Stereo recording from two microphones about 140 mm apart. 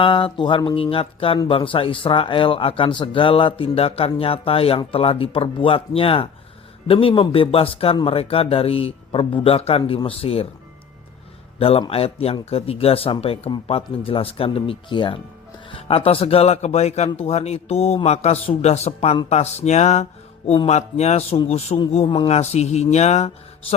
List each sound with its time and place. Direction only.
0.0 s speech: 40° left (ahead or behind)
11.6 s speech: 45° left (ahead or behind)